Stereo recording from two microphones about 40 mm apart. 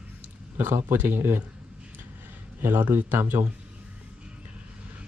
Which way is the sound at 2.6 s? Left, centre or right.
Right.